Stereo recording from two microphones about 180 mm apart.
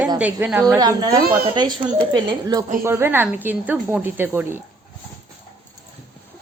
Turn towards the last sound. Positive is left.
turn(degrees=-10)  # may be behind; listen again after turning